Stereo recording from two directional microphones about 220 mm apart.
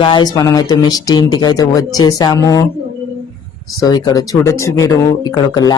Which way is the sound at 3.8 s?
20° left (ahead or behind).